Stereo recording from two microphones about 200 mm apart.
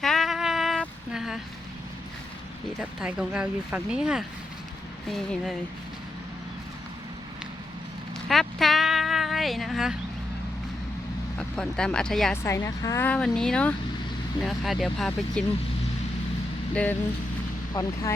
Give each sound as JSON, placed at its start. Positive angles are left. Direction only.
{"t": 0.0, "sound": "a sound", "side_deg": 0}
{"t": 3.0, "sound": "speech", "side_deg": -5}
{"t": 8.3, "sound": "a sound", "side_deg": 0}
{"t": 11.3, "sound": "speech", "side_deg": 5}
{"t": 12.4, "sound": "speech", "side_deg": 15}
{"t": 16.7, "sound": "speech", "side_deg": 10}
{"t": 17.7, "sound": "speech", "side_deg": 20}